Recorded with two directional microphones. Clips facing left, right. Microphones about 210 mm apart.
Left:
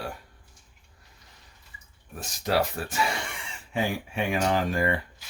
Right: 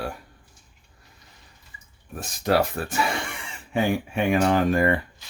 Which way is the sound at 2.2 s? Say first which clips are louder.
Right 4 dB; 55° right (ahead or behind).